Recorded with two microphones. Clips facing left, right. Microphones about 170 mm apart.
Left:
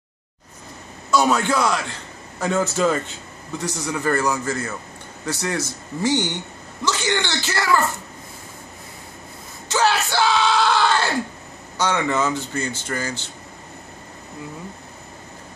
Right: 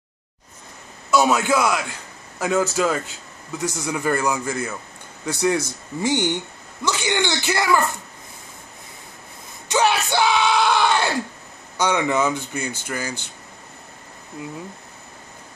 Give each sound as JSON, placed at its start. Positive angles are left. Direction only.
{"t": 1.1, "sound": "a man's voice", "side_deg": -10}
{"t": 3.6, "sound": "speech", "side_deg": -10}
{"t": 9.7, "sound": "yell", "side_deg": -15}
{"t": 11.8, "sound": "speech", "side_deg": -15}